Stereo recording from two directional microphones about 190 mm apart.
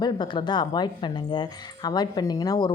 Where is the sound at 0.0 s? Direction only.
25° left (ahead or behind).